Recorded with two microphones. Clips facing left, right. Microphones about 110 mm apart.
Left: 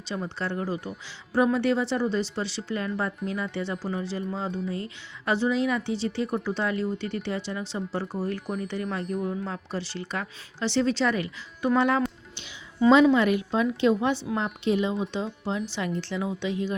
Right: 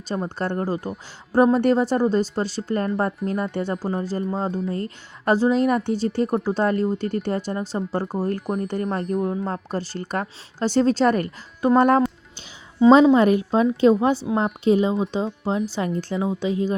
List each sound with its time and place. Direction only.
0.1 s speech: 45° right (ahead or behind)
16.2 s speech: 35° right (ahead or behind)